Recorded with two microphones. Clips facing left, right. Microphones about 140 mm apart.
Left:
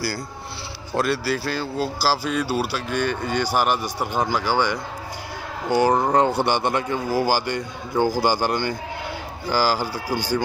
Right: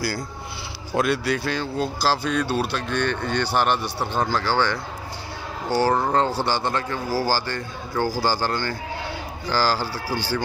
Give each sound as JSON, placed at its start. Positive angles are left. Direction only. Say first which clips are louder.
{"t": 0.9, "sound": "speech", "louder": "even", "side_deg": 0}